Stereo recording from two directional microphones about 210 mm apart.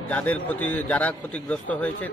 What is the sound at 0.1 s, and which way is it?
A man's voice, 5° left (ahead or behind).